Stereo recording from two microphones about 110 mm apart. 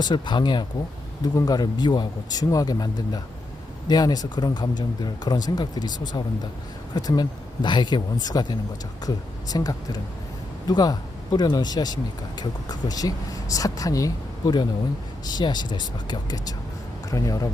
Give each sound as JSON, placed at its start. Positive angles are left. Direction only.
{"t": 0.0, "sound": "speech", "side_deg": 45}